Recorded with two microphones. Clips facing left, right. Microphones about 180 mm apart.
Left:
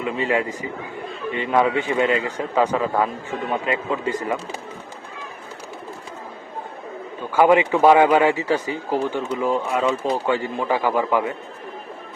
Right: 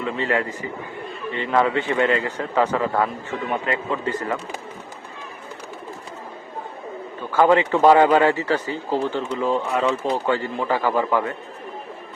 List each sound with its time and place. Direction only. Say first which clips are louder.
0.0 s speech: left 1 dB; 15° left (ahead or behind)
7.3 s speech: left 1 dB; 15° left (ahead or behind)